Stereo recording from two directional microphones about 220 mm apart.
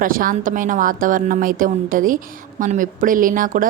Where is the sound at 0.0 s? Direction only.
40° right (ahead or behind).